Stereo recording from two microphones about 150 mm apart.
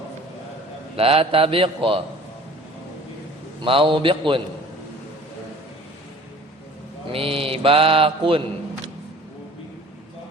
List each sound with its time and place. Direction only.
0.9 s mantra: 40° right (ahead or behind)
3.6 s mantra: 35° right (ahead or behind)
7.1 s mantra: 40° right (ahead or behind)